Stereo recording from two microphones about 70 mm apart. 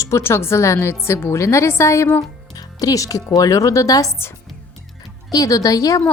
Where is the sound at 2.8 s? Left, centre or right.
Left.